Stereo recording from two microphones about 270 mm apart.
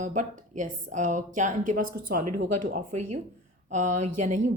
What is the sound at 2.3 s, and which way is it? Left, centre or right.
Speech, right.